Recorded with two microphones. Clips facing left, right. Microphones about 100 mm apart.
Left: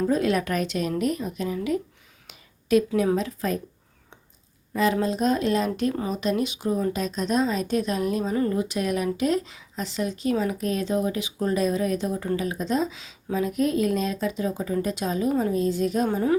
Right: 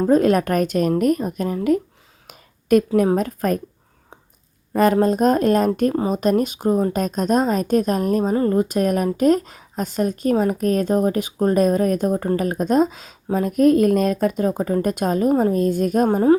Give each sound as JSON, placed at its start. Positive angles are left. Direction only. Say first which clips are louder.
{"t": 0.0, "sound": "a woman's voice", "louder": "right 7 dB", "side_deg": -45}
{"t": 2.2, "sound": "a sound", "louder": "right 9 dB", "side_deg": -50}
{"t": 3.2, "sound": "a woman's voice", "louder": "right 6 dB", "side_deg": -50}
{"t": 4.7, "sound": "a woman's voice", "louder": "right 7 dB", "side_deg": -50}